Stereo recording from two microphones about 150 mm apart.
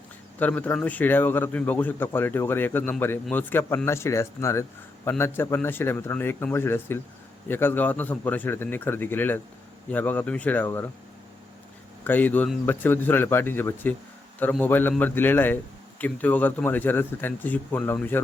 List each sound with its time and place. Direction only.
0.3 s a man's voice: 10° left (ahead or behind)
12.0 s a man's voice: 10° left (ahead or behind)